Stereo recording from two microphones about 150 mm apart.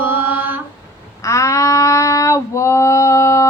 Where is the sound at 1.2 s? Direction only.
20° left (ahead or behind).